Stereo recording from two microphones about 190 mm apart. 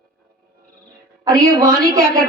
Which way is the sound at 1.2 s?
20° right (ahead or behind).